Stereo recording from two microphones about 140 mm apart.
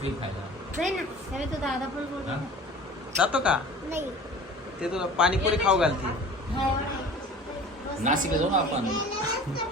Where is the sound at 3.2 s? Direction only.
10° right (ahead or behind).